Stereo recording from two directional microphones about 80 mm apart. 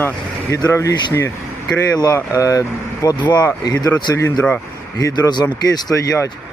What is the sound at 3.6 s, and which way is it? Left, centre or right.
Speech, left.